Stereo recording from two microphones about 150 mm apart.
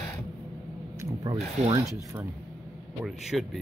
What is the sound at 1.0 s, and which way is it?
Speech, 25° right (ahead or behind).